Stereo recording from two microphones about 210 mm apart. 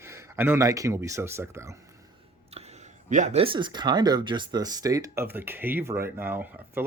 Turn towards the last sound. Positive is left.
turn(degrees=-10)  # may be behind; listen again after turning